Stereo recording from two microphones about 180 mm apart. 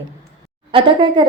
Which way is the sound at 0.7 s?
25° right (ahead or behind).